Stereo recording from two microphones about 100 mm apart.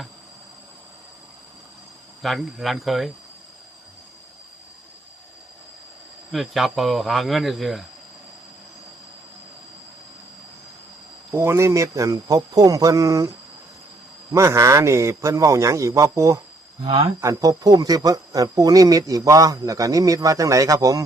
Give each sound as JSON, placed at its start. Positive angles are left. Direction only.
{"t": 2.2, "sound": "speech", "side_deg": 0}
{"t": 6.3, "sound": "speech", "side_deg": 0}
{"t": 11.3, "sound": "a man's voice", "side_deg": -25}
{"t": 14.3, "sound": "a man's voice", "side_deg": -30}
{"t": 16.8, "sound": "speech", "side_deg": -60}
{"t": 17.2, "sound": "a man's voice", "side_deg": -35}